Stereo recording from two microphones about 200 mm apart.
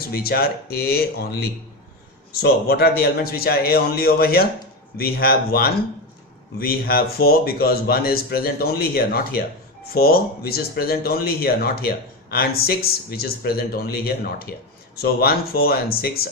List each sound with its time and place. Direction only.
0.0 s speech: 50° left (ahead or behind)